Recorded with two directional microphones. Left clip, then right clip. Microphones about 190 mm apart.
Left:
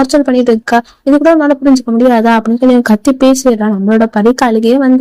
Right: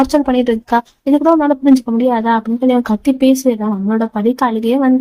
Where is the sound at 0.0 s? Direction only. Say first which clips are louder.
Left 4 dB; 20° left (ahead or behind).